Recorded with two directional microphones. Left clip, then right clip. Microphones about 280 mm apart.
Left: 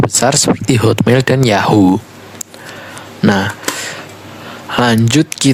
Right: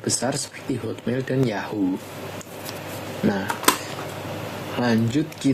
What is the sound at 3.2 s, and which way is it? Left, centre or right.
Speech, left.